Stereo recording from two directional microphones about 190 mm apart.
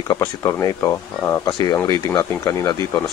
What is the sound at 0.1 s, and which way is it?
Speech, 15° left (ahead or behind).